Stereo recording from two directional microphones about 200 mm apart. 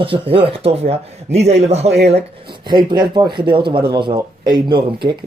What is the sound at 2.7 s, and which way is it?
Speech, 20° right (ahead or behind).